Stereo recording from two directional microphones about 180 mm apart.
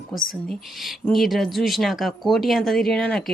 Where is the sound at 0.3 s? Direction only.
Centre (ahead or behind).